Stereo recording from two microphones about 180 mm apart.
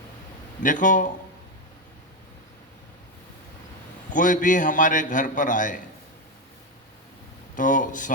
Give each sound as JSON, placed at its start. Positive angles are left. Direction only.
{"t": 0.6, "sound": "a man's voice", "side_deg": 45}
{"t": 4.1, "sound": "a man's voice", "side_deg": 45}
{"t": 7.5, "sound": "a man's voice", "side_deg": 45}